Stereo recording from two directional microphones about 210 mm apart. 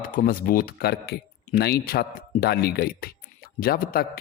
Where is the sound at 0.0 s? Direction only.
40° left (ahead or behind).